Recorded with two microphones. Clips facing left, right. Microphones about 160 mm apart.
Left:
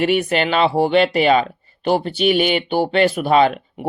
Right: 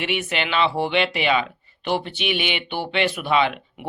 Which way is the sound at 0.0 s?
40° left (ahead or behind).